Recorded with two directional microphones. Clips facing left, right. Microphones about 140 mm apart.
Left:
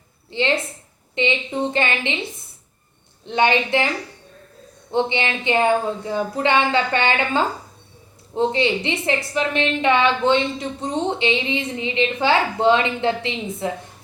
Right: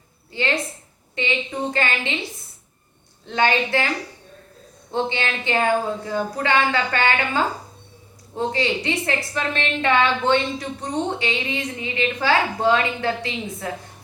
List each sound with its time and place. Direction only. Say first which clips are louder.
0.3 s a woman's voice: left 3 dB; 25° left (ahead or behind)
3.2 s a woman's voice: left 2 dB; 20° left (ahead or behind)
4.9 s a woman's voice: left 3 dB; 20° left (ahead or behind)